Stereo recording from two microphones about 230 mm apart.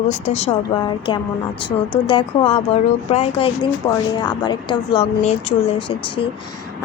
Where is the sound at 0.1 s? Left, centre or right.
Left.